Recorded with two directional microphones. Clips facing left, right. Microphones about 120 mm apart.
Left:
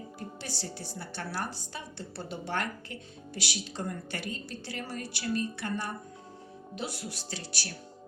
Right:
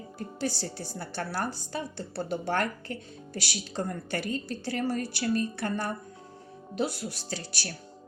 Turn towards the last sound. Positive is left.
turn(degrees=-40)  # may be behind; listen again after turning